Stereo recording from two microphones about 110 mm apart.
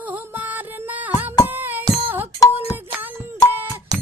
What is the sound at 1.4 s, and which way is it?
Music, 15° right (ahead or behind).